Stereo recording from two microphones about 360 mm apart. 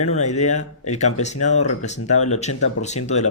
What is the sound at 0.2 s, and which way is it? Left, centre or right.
Speech, centre.